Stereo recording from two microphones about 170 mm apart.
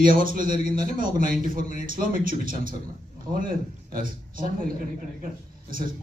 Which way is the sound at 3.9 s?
55° right (ahead or behind).